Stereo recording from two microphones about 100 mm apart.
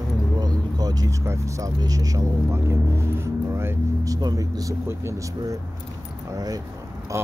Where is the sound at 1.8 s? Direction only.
35° right (ahead or behind).